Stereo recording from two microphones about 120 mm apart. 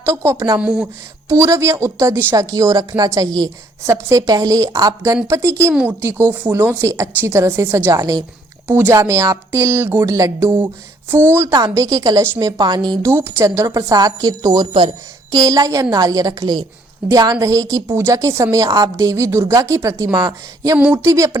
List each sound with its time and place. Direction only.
0.0 s a woman's voice: 25° right (ahead or behind)
0.6 s speech: 10° right (ahead or behind)
1.3 s a woman's voice: 25° right (ahead or behind)
11.5 s a woman's voice: 30° right (ahead or behind)
13.0 s a woman's voice: 20° right (ahead or behind)
20.1 s a woman's voice: 40° right (ahead or behind)
20.7 s speech: 10° right (ahead or behind)
21.0 s a woman's voice: 25° right (ahead or behind)